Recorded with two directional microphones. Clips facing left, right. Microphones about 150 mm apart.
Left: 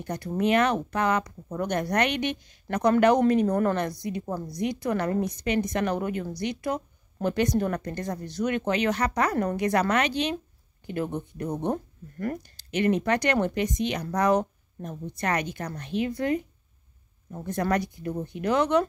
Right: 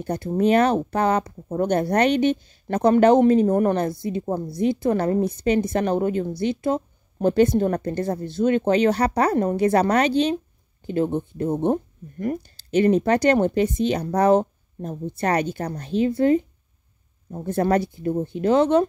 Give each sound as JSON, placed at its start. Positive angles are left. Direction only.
{"t": 0.0, "sound": "a woman's voice", "side_deg": -30}